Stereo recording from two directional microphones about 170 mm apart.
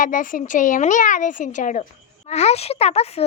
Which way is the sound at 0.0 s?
50° left (ahead or behind).